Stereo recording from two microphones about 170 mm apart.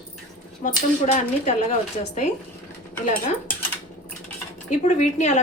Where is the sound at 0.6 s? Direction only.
45° left (ahead or behind).